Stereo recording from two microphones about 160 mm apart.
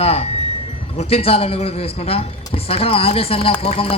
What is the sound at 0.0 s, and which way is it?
Music, 40° left (ahead or behind).